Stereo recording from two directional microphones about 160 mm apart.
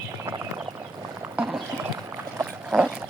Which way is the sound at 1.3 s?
5° right (ahead or behind).